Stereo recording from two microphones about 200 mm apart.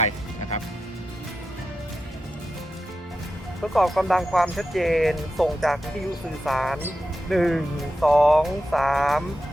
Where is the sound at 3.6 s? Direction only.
Centre (ahead or behind).